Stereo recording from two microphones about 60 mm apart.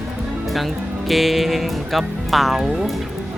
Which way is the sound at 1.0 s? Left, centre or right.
Centre.